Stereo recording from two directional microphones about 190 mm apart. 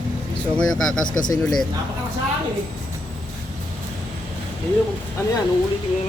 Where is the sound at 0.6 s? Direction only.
90° left.